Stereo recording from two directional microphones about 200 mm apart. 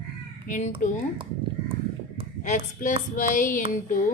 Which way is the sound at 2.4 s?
40° left (ahead or behind).